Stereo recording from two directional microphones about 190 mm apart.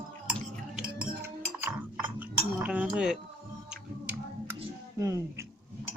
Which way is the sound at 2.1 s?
10° right (ahead or behind).